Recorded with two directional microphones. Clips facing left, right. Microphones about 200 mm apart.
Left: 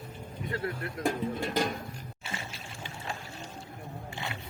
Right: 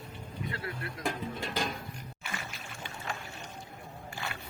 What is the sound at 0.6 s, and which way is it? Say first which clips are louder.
Speech: left 5 dB; 50° left (ahead or behind).